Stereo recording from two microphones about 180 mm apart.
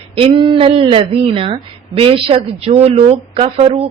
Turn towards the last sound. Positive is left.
turn(degrees=-35)  # may be behind; listen again after turning